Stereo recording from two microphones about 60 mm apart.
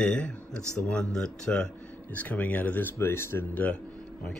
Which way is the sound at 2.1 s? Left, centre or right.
Left.